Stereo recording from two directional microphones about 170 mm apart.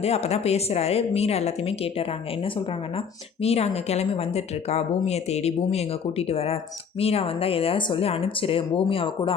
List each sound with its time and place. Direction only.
0.0 s speech: 40° left (ahead or behind)